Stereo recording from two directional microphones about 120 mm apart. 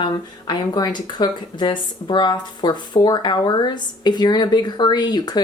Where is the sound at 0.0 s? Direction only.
35° left (ahead or behind).